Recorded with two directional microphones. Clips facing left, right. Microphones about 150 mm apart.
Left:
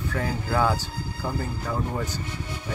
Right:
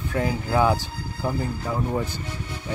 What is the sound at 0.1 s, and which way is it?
Speech, 10° right (ahead or behind).